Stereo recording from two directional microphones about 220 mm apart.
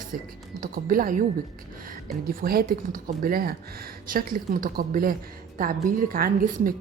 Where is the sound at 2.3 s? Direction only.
40° right (ahead or behind).